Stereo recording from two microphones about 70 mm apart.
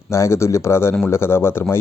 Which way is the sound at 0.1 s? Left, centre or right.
Left.